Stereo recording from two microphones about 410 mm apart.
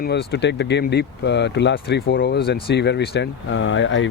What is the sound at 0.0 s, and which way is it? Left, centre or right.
Speech, left.